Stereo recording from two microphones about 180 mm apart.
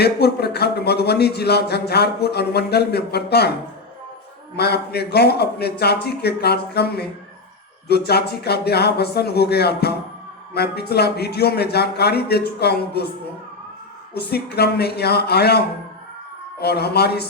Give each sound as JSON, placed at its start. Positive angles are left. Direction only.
{"t": 0.0, "sound": "speech", "side_deg": 65}
{"t": 4.5, "sound": "speech", "side_deg": 65}
{"t": 14.1, "sound": "speech", "side_deg": 60}